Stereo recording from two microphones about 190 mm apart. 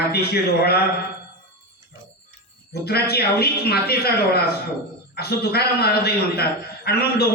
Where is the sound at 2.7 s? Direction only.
55° left (ahead or behind).